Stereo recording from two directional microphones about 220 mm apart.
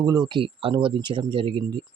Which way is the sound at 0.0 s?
20° right (ahead or behind).